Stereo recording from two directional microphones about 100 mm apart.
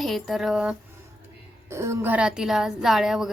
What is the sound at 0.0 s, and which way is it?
Speech, centre (ahead or behind).